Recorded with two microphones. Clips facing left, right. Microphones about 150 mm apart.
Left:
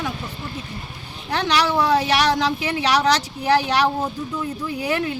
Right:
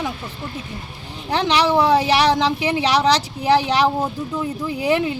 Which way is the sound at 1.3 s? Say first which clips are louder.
Right 3 dB; 30° right (ahead or behind).